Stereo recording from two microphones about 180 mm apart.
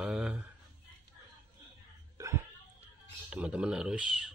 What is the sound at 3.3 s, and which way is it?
Speech, 5° right (ahead or behind).